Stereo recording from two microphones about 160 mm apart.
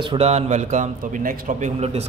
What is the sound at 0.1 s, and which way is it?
A man's voice, 40° right (ahead or behind).